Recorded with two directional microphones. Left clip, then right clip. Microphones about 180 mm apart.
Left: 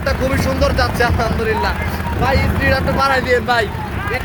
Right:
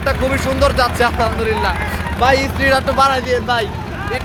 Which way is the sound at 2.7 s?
15° right (ahead or behind).